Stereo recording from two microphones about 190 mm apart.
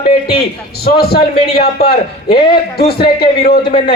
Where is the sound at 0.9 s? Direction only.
55° left (ahead or behind).